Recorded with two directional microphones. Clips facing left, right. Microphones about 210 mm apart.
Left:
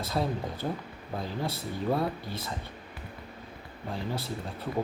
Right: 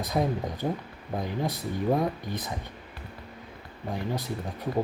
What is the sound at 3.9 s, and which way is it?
Speech, 15° right (ahead or behind).